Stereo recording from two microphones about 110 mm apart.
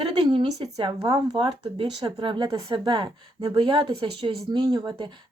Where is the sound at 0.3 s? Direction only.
50° right (ahead or behind).